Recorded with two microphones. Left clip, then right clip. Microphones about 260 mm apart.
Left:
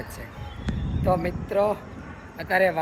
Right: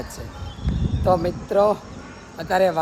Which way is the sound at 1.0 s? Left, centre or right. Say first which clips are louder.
Right 5 dB; centre.